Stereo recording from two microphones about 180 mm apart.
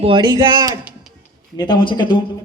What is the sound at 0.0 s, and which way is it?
Speech, 25° right (ahead or behind).